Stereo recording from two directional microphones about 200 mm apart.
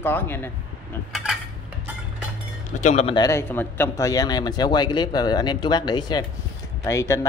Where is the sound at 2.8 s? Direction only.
35° left (ahead or behind).